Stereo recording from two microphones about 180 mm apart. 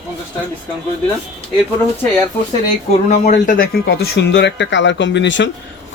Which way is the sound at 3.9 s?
65° left (ahead or behind).